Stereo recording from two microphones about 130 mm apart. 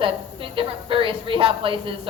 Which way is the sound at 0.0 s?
40° right (ahead or behind).